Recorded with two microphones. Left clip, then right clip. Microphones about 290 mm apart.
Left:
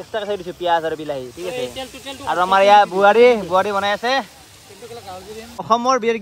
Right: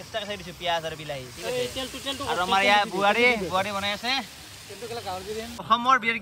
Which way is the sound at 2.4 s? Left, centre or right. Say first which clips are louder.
Left 10 dB; left.